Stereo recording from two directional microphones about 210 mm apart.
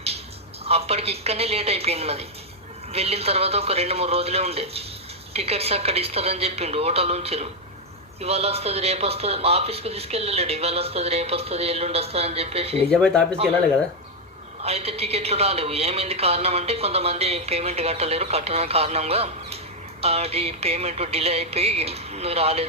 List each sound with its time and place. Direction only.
0.6 s speech: 30° right (ahead or behind)
12.9 s speech: 5° left (ahead or behind)
14.6 s speech: 30° right (ahead or behind)